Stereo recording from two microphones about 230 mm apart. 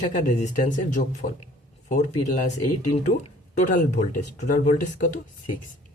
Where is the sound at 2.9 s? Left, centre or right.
Left.